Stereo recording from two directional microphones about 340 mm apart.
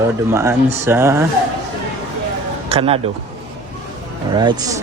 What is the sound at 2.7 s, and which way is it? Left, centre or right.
Speech, centre.